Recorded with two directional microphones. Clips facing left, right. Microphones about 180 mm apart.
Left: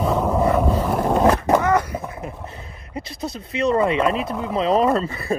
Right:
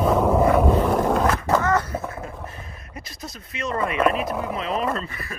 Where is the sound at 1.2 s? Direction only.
15° left (ahead or behind).